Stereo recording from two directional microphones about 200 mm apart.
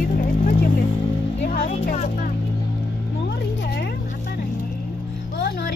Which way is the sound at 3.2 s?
55° left (ahead or behind).